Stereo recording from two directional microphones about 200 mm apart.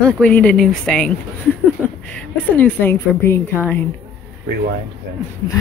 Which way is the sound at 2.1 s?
10° left (ahead or behind).